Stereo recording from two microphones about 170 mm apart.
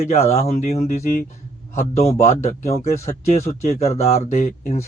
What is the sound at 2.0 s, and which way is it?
A man's voice, 40° left (ahead or behind).